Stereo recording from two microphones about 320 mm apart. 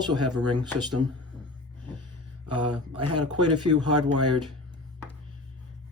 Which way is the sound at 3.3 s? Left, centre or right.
Centre.